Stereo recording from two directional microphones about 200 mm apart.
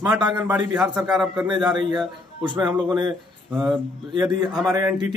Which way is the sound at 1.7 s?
20° right (ahead or behind).